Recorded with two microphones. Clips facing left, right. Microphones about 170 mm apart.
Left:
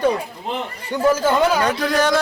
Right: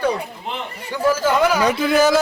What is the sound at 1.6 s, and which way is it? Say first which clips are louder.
Speech: right 3 dB; 5° right (ahead or behind).